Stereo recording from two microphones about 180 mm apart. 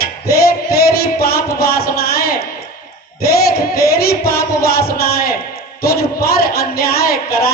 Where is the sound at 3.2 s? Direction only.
60° left (ahead or behind).